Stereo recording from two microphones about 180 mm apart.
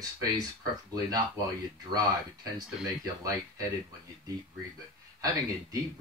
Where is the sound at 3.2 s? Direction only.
20° right (ahead or behind).